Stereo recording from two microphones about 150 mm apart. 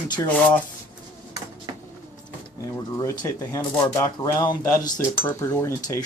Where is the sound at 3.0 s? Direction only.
20° left (ahead or behind).